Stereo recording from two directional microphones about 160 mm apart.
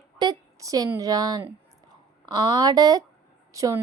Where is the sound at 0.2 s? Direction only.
25° right (ahead or behind).